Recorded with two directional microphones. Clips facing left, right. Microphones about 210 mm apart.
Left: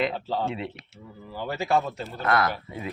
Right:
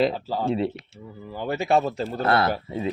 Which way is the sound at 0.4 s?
35° right (ahead or behind).